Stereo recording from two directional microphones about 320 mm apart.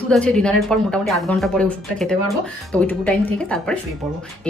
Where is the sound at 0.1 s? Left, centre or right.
Centre.